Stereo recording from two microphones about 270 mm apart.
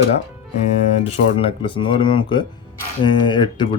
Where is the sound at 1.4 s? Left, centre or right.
Centre.